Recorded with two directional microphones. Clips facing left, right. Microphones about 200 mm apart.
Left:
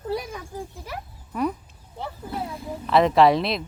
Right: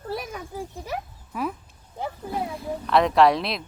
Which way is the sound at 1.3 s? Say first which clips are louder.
Left 4 dB; centre (ahead or behind).